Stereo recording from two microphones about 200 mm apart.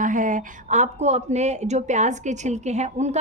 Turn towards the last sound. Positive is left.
turn(degrees=-35)  # may be behind; listen again after turning